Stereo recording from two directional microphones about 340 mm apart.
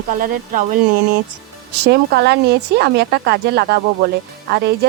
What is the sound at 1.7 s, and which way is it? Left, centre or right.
Speech, right.